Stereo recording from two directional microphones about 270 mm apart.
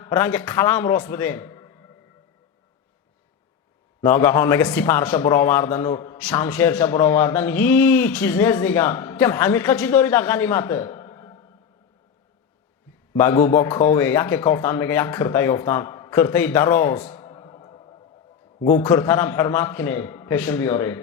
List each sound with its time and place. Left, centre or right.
0.0 s speech: centre
4.0 s a man's voice: centre
13.1 s a man's voice: centre